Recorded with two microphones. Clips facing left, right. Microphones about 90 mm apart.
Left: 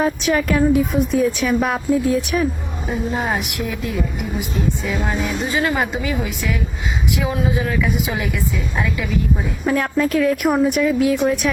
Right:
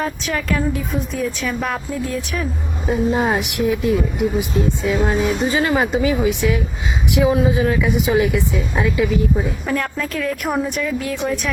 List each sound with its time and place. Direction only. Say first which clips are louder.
0.0 s a woman's voice: left 5 dB; 15° left (ahead or behind)
2.9 s speech: right 4 dB; 10° right (ahead or behind)
3.3 s a woman's voice: right 5 dB; 25° right (ahead or behind)
9.6 s a woman's voice: left 4 dB; 5° left (ahead or behind)